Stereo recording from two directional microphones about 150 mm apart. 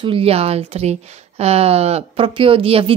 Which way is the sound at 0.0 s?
40° right (ahead or behind).